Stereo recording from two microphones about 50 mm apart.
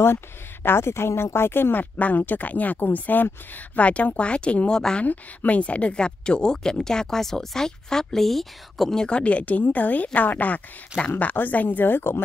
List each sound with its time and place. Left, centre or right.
0.7 s speech: left
2.0 s speech: left
4.7 s speech: centre
5.0 s speech: left; by 9.0 s centre
9.0 s speech: left